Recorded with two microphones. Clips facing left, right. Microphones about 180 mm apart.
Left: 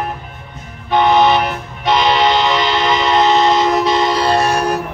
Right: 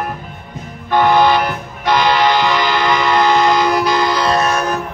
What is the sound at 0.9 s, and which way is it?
Music, 20° left (ahead or behind).